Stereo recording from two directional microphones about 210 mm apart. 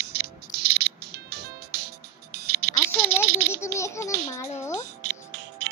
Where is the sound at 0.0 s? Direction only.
50° right (ahead or behind).